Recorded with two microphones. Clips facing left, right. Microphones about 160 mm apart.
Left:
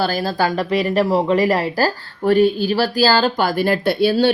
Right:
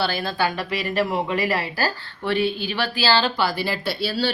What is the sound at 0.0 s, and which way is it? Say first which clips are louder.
Speech: left 4 dB; 40° left (ahead or behind).